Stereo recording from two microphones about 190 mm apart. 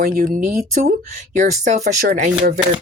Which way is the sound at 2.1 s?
55° right (ahead or behind).